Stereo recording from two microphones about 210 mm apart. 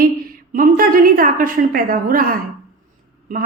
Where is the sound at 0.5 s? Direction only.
40° right (ahead or behind).